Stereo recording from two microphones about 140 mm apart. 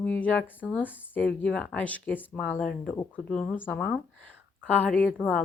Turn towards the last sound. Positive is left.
turn(degrees=10)  # may be behind; listen again after turning